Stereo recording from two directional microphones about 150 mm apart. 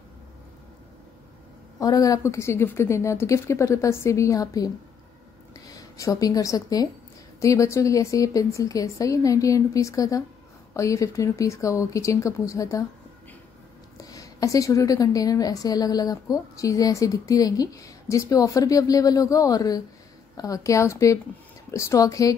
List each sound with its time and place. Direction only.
1.8 s a woman's voice: 25° left (ahead or behind)
13.9 s a woman's voice: 25° left (ahead or behind)